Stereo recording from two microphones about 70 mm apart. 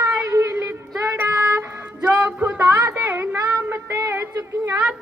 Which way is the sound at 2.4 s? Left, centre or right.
Right.